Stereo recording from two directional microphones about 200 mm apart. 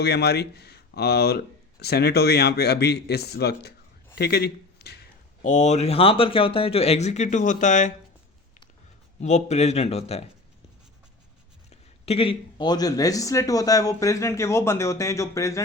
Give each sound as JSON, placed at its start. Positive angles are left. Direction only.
{"t": 0.0, "sound": "speech", "side_deg": 55}
{"t": 5.4, "sound": "speech", "side_deg": 40}
{"t": 9.2, "sound": "speech", "side_deg": 35}
{"t": 11.7, "sound": "speech", "side_deg": 30}